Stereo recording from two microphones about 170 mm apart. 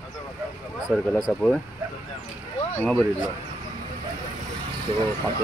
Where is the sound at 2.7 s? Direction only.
10° left (ahead or behind).